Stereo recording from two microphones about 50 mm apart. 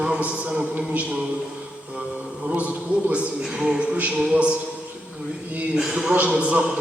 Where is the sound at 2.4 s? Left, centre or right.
Right.